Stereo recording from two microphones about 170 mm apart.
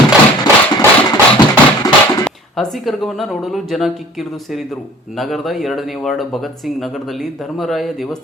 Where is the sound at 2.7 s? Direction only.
Centre (ahead or behind).